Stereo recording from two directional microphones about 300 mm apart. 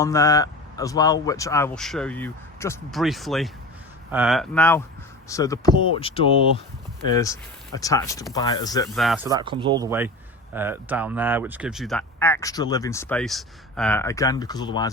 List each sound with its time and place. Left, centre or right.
0.0 s speech: centre
9.0 s speech: centre